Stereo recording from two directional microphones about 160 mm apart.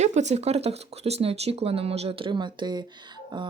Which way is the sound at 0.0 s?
45° right (ahead or behind).